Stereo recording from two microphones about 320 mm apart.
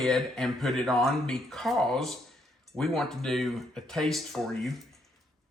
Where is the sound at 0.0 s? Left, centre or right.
Centre.